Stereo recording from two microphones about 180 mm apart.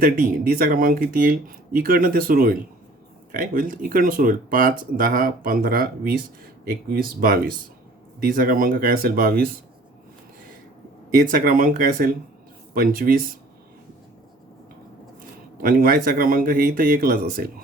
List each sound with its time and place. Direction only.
0.0 s speech: 55° right (ahead or behind)
11.2 s speech: 50° right (ahead or behind)
15.6 s speech: 55° right (ahead or behind)